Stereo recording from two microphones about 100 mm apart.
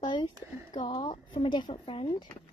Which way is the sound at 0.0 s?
45° left (ahead or behind).